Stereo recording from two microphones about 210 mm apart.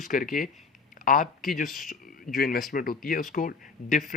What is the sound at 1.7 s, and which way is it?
Speech, centre (ahead or behind).